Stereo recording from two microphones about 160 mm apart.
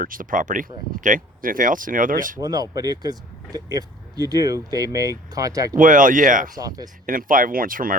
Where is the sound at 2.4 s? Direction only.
25° right (ahead or behind).